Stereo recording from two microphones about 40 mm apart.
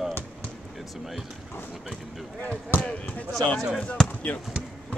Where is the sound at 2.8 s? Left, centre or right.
Left.